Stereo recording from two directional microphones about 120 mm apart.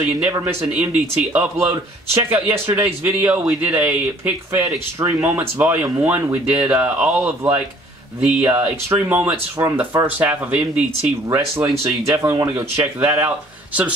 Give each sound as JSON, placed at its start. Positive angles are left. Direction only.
{"t": 0.0, "sound": "a man's voice", "side_deg": -10}
{"t": 12.1, "sound": "speech", "side_deg": -30}